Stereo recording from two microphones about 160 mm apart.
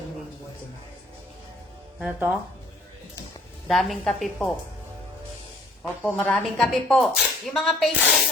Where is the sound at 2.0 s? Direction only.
5° right (ahead or behind).